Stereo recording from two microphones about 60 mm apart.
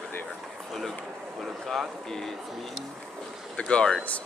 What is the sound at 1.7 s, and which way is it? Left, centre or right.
Speech, centre.